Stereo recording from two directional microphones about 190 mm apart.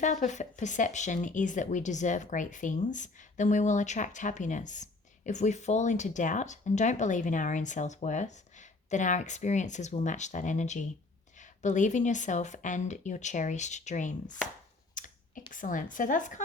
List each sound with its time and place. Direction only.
0.0 s speech: 40° left (ahead or behind)
14.9 s clicking: 45° left (ahead or behind)
15.5 s a woman's voice: 45° left (ahead or behind)